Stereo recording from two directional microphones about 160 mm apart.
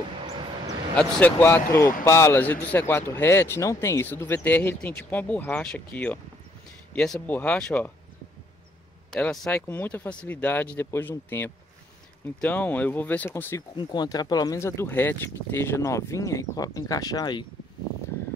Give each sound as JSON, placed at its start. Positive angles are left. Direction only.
{"t": 0.9, "sound": "a man's voice", "side_deg": 10}
{"t": 9.2, "sound": "a man's voice", "side_deg": 5}